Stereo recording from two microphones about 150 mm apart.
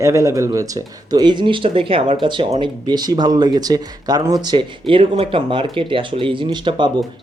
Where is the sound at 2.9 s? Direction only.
25° right (ahead or behind).